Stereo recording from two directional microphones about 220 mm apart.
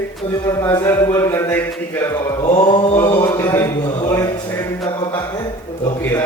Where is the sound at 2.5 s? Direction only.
25° left (ahead or behind).